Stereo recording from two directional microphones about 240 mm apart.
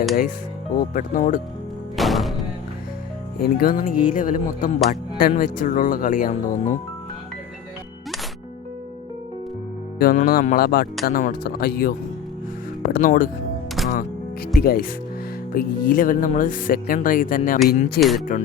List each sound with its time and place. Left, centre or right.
0.8 s speech: left
2.0 s music: centre
3.4 s speech: left
10.0 s speech: left
13.8 s music: centre
14.5 s speech: left